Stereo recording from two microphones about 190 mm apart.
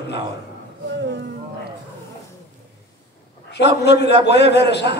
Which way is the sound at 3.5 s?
65° left (ahead or behind).